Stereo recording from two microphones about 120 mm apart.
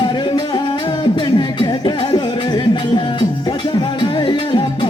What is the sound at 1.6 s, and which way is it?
Music, 40° left (ahead or behind).